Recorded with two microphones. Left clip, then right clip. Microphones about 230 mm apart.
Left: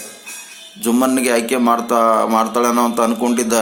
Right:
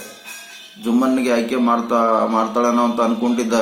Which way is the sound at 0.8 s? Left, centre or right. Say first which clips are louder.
Left 2 dB; left.